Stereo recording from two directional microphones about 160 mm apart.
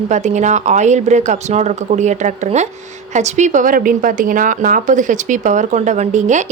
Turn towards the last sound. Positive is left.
turn(degrees=-50)  # may be behind; listen again after turning